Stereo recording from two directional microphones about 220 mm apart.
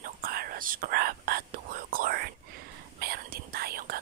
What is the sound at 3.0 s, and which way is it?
Whispering, 40° right (ahead or behind).